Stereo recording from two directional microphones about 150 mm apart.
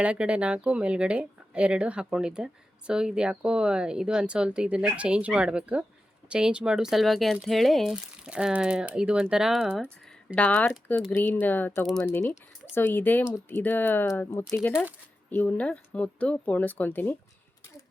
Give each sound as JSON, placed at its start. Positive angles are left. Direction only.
{"t": 0.0, "sound": "speech", "side_deg": -5}